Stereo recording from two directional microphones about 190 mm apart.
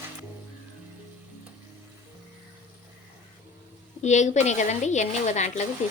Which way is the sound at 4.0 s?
40° left (ahead or behind).